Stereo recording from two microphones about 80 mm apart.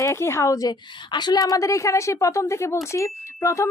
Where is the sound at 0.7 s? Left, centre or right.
Left.